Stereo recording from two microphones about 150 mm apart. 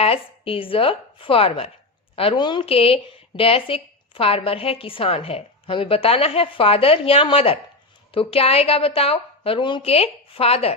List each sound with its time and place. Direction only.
0.0 s a woman's voice: 40° left (ahead or behind)